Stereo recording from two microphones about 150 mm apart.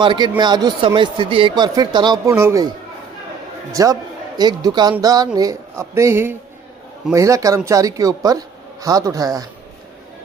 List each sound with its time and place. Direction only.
0.0 s speech: 30° right (ahead or behind)
2.3 s a man's voice: 20° right (ahead or behind)